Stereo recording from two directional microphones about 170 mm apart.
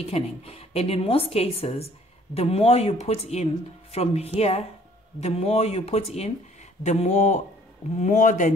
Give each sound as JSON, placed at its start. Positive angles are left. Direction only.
{"t": 0.0, "sound": "a woman's voice", "side_deg": 35}